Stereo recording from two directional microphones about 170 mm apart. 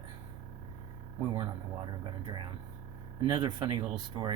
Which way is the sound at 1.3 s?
25° right (ahead or behind).